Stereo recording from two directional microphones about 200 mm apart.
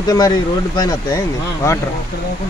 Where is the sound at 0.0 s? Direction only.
15° left (ahead or behind).